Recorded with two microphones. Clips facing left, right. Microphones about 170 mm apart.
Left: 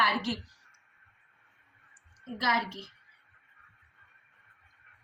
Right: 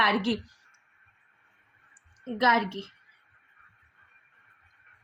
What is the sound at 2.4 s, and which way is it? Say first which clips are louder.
Speech: right 6 dB; 55° right (ahead or behind).